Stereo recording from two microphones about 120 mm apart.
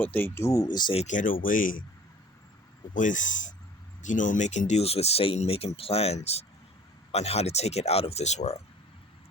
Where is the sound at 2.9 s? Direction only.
90° left; by 8.6 s 65° left (ahead or behind).